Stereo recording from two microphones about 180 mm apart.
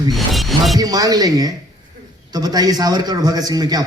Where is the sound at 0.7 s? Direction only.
20° right (ahead or behind).